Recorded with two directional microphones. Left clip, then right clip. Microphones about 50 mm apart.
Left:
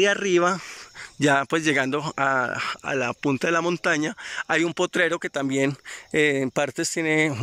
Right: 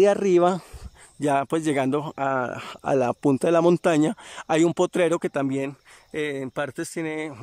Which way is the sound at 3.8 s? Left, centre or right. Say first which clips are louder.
Right 2 dB; right.